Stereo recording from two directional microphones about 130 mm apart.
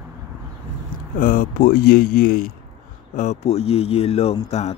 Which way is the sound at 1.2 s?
90° left.